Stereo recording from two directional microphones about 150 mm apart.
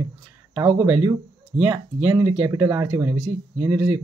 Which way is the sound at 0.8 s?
10° right (ahead or behind).